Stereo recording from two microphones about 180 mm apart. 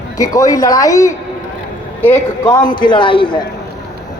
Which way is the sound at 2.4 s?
25° left (ahead or behind).